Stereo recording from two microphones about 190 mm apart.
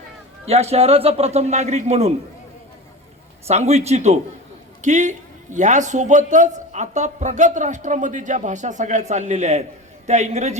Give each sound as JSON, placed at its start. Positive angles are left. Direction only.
{"t": 0.4, "sound": "a man's voice", "side_deg": -35}
{"t": 3.4, "sound": "a man's voice", "side_deg": -35}